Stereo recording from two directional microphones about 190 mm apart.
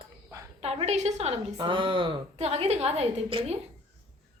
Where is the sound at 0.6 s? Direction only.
35° right (ahead or behind).